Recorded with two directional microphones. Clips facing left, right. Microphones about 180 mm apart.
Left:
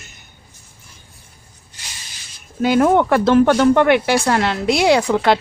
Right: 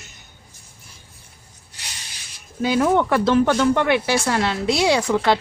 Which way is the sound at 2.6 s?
55° left (ahead or behind).